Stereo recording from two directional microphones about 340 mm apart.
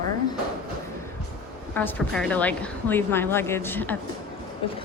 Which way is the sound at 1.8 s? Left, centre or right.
Centre.